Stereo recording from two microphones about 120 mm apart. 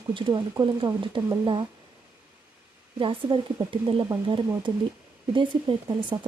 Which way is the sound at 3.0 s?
45° right (ahead or behind).